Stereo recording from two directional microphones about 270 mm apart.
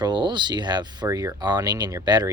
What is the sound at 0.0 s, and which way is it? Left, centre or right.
Speech, centre.